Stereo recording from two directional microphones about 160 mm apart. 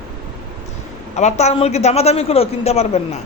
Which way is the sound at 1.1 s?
45° left (ahead or behind).